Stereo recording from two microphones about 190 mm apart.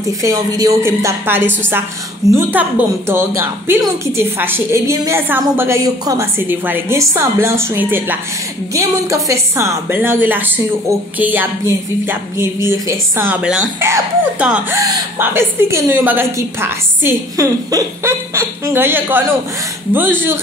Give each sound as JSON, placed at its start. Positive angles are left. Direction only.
{"t": 0.2, "sound": "a woman's voice", "side_deg": -20}
{"t": 2.6, "sound": "a woman's voice", "side_deg": -10}